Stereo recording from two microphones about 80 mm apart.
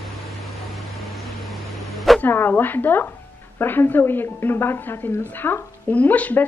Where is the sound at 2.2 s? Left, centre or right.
Left.